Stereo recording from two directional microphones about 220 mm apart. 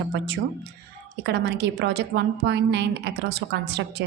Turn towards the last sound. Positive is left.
turn(degrees=-50)  # may be behind; listen again after turning